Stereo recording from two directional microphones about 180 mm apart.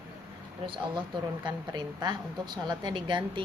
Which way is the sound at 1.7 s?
25° right (ahead or behind).